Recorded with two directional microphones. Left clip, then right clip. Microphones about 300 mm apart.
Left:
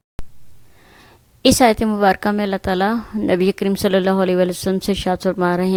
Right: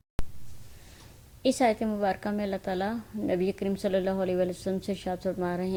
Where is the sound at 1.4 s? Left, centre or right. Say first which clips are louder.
Left 11 dB; left.